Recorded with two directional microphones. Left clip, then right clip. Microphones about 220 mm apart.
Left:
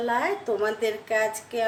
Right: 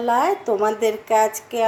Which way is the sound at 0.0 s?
20° right (ahead or behind).